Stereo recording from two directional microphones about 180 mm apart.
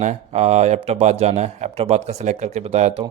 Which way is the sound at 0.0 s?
40° right (ahead or behind).